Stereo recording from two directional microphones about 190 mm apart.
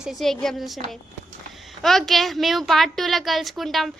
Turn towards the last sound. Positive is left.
turn(degrees=0)  # may be behind; listen again after turning